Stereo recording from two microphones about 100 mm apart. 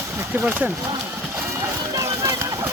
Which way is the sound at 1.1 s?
20° right (ahead or behind).